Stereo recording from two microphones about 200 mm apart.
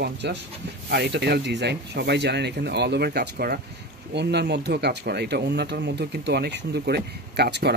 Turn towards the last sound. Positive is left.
turn(degrees=-55)  # may be behind; listen again after turning